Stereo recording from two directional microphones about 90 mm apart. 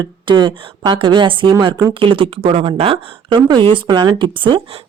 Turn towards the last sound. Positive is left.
turn(degrees=-60)  # may be behind; listen again after turning